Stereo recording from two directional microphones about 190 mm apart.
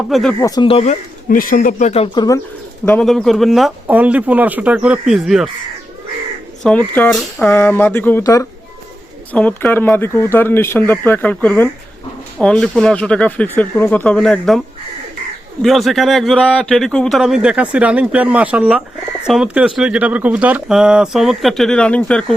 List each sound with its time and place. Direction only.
0.1 s speech: centre (ahead or behind)
0.4 s speech: 25° left (ahead or behind)
1.3 s speech: 45° left (ahead or behind)
2.1 s speech: 20° left (ahead or behind)
2.8 s speech: 5° left (ahead or behind)
6.6 s speech: 5° left (ahead or behind)
15.6 s speech: centre (ahead or behind)